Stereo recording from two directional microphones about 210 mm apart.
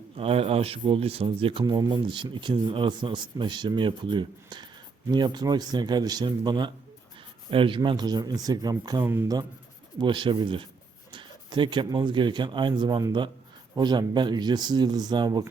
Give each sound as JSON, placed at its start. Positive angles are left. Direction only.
{"t": 0.2, "sound": "speech", "side_deg": -25}